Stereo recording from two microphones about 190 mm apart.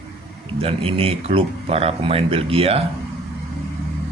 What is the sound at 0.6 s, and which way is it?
Speech, 30° right (ahead or behind).